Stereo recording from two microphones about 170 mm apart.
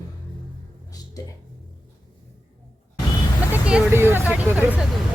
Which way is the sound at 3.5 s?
5° right (ahead or behind).